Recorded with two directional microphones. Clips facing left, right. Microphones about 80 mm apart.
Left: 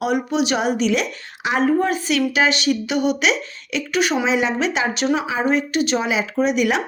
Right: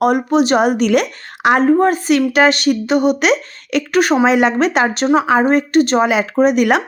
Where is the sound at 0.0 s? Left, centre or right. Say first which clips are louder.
Right 7 dB; right.